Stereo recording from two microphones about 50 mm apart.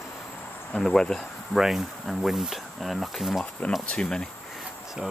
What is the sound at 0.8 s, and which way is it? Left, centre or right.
Speech, centre.